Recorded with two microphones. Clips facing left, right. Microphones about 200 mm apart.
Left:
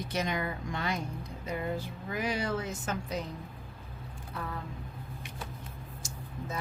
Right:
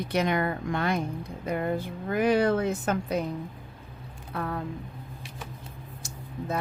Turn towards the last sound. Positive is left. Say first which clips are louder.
# right 7 dB
turn(degrees=-60)  # may be behind; listen again after turning